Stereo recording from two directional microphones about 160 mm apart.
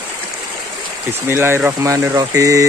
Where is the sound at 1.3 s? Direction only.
15° right (ahead or behind).